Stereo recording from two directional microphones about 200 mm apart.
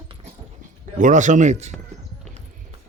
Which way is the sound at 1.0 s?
40° right (ahead or behind).